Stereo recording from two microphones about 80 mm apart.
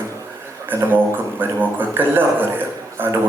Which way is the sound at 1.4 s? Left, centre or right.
Right.